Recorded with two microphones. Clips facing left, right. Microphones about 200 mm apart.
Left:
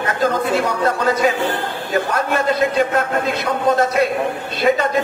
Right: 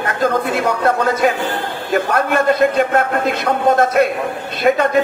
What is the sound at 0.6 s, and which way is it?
A man's voice, 55° right (ahead or behind).